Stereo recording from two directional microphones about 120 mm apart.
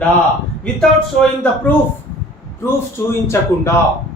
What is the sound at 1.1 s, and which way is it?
Speech, 10° left (ahead or behind).